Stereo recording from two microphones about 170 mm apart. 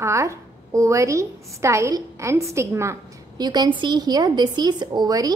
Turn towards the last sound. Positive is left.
turn(degrees=-20)  # may be behind; listen again after turning